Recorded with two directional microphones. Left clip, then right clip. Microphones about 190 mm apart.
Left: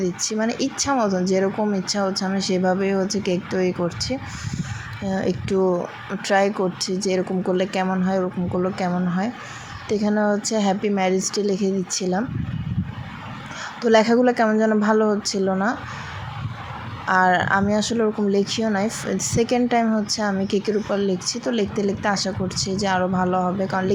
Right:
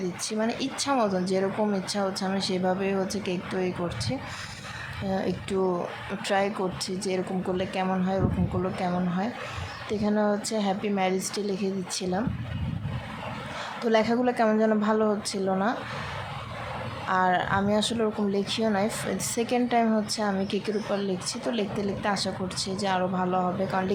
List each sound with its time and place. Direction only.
0.0 s speech: 15° left (ahead or behind)
1.0 s speech: 5° right (ahead or behind)
1.3 s speech: 15° left (ahead or behind)
13.8 s speech: 20° left (ahead or behind)
17.1 s speech: 15° left (ahead or behind)